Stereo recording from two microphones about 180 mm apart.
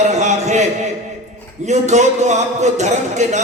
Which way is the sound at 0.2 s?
40° right (ahead or behind).